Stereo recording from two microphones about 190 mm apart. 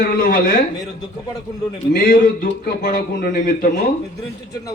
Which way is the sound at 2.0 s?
50° left (ahead or behind).